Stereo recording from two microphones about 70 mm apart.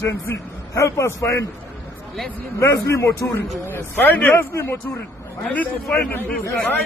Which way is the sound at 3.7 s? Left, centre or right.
Left.